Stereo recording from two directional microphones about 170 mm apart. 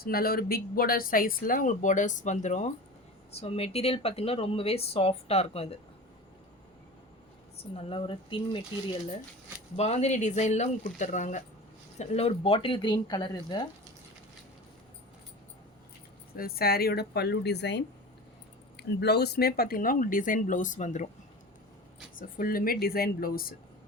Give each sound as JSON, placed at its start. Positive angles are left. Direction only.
{"t": 0.0, "sound": "speech", "side_deg": 60}
{"t": 7.8, "sound": "speech", "side_deg": 35}
{"t": 9.7, "sound": "speech", "side_deg": 40}
{"t": 16.3, "sound": "a woman's voice", "side_deg": 60}
{"t": 22.1, "sound": "speech", "side_deg": 55}